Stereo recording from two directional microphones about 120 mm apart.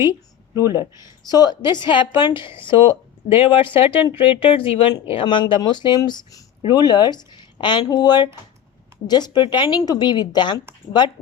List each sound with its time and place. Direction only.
0.7 s speech: 25° right (ahead or behind)
1.3 s speech: 35° left (ahead or behind)